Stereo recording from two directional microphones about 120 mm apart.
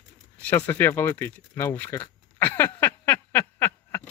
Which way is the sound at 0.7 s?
20° left (ahead or behind).